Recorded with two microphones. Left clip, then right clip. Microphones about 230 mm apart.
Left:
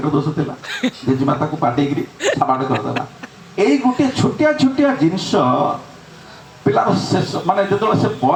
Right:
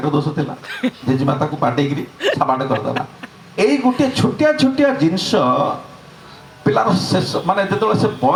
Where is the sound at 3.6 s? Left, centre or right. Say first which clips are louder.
Even; right.